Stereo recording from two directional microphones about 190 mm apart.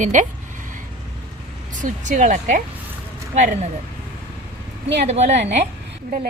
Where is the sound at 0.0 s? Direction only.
40° right (ahead or behind).